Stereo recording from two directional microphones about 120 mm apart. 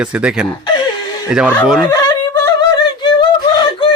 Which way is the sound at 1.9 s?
35° left (ahead or behind).